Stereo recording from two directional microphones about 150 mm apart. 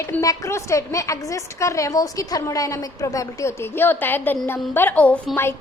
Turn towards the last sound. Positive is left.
turn(degrees=10)  # may be behind; listen again after turning